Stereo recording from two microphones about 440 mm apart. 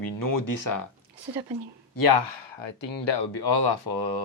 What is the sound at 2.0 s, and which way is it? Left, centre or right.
Speech, left.